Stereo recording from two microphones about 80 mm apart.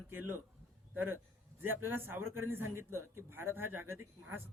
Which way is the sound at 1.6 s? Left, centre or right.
Right.